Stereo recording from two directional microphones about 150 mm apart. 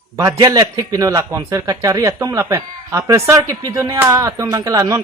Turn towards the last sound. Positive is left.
turn(degrees=-20)  # may be behind; listen again after turning